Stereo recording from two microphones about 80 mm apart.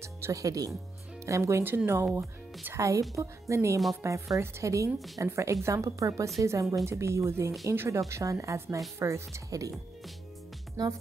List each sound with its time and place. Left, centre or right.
0.0 s a woman's voice: right
4.9 s a woman's voice: centre
5.2 s a woman's voice: right
8.1 s a woman's voice: right
10.8 s speech: right